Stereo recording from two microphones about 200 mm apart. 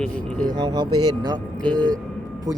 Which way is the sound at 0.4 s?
20° right (ahead or behind).